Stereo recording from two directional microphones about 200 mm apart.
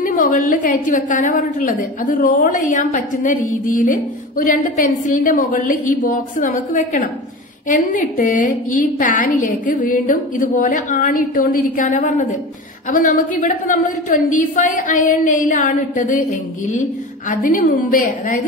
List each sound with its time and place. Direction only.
0.0 s a woman's voice: 40° left (ahead or behind)